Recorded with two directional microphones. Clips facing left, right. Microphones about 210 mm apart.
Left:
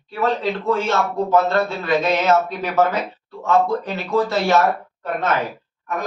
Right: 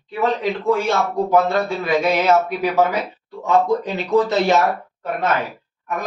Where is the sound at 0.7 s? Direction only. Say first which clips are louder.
Right 2 dB; 15° right (ahead or behind).